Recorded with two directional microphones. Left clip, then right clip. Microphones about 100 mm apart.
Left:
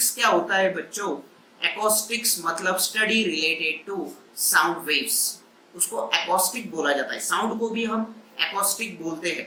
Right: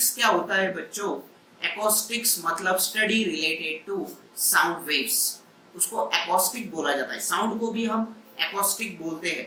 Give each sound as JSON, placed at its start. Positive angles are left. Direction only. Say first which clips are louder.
{"t": 0.0, "sound": "a man's voice", "louder": "left 1 dB", "side_deg": 15}